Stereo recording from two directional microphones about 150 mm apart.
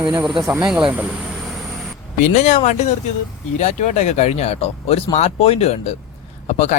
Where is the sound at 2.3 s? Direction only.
55° left (ahead or behind).